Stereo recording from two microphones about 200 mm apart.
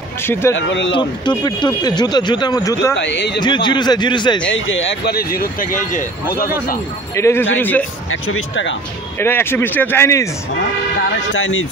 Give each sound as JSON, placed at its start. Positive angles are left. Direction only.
{"t": 0.3, "sound": "speech", "side_deg": 10}
{"t": 0.6, "sound": "speech", "side_deg": 65}
{"t": 1.4, "sound": "speech", "side_deg": 20}
{"t": 3.1, "sound": "speech", "side_deg": 60}
{"t": 3.3, "sound": "speech", "side_deg": 20}
{"t": 4.5, "sound": "speech", "side_deg": 75}
{"t": 5.1, "sound": "speech", "side_deg": 45}
{"t": 7.2, "sound": "speech", "side_deg": 15}
{"t": 8.1, "sound": "speech", "side_deg": 85}
{"t": 9.2, "sound": "speech", "side_deg": 10}
{"t": 11.0, "sound": "speech", "side_deg": 75}